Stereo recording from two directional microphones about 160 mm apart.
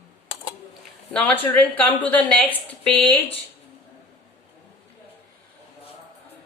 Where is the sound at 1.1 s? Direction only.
10° left (ahead or behind).